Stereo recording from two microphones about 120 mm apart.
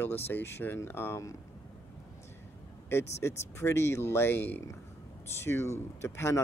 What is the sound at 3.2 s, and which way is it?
Speech, 20° left (ahead or behind).